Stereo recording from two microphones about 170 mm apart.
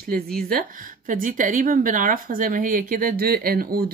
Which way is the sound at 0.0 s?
60° right (ahead or behind).